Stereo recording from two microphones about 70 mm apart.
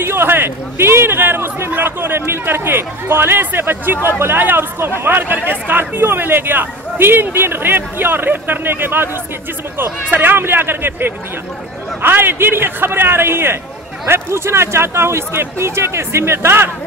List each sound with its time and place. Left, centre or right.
0.0 s speech: right
10.1 s speech: right